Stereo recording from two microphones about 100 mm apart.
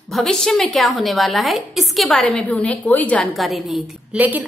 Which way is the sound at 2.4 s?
15° left (ahead or behind).